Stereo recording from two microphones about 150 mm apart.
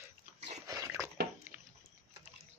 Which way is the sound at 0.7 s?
20° right (ahead or behind).